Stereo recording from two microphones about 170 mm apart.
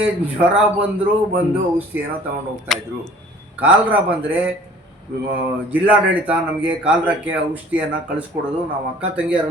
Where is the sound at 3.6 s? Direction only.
10° right (ahead or behind).